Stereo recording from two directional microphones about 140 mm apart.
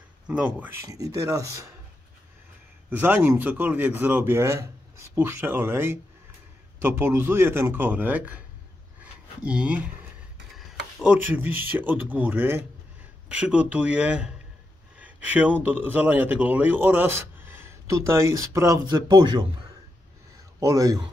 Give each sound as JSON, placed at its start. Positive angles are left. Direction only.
{"t": 0.3, "sound": "a man's voice", "side_deg": -10}
{"t": 0.8, "sound": "speech", "side_deg": -25}
{"t": 2.9, "sound": "a man's voice", "side_deg": -10}
{"t": 9.0, "sound": "a sound", "side_deg": -10}
{"t": 10.6, "sound": "a man's voice", "side_deg": -5}
{"t": 15.0, "sound": "a sound", "side_deg": -10}
{"t": 15.6, "sound": "a man's voice", "side_deg": -10}
{"t": 20.6, "sound": "speech", "side_deg": -25}